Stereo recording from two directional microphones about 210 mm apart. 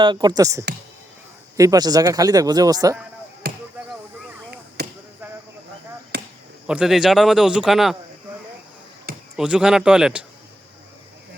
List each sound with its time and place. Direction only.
0.0 s a man's voice: 20° right (ahead or behind)
3.4 s chop: 50° right (ahead or behind)
4.8 s basketball bounce: 50° right (ahead or behind)
6.1 s chop: 50° right (ahead or behind)
6.7 s a man's voice: 5° right (ahead or behind)
9.3 s a man's voice: 5° right (ahead or behind)